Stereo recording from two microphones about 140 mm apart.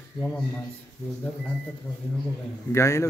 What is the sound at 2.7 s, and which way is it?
Speech, 20° left (ahead or behind).